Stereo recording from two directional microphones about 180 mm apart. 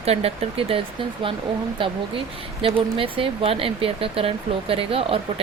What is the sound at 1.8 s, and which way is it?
Speech, 30° right (ahead or behind).